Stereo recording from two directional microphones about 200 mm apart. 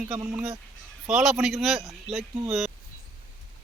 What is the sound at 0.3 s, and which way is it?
A man's voice, 10° right (ahead or behind).